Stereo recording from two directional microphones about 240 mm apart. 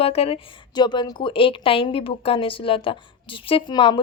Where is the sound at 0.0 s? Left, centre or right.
Left.